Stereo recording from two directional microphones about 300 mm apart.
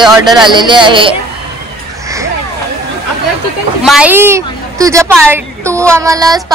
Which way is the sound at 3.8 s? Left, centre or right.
Centre.